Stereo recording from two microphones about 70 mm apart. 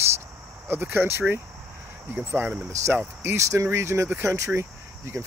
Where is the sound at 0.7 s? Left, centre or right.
Right.